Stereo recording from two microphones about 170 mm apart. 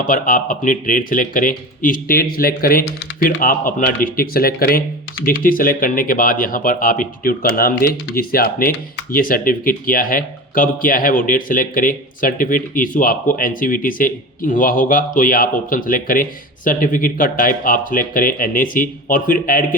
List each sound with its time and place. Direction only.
0.1 s speech: 55° left (ahead or behind)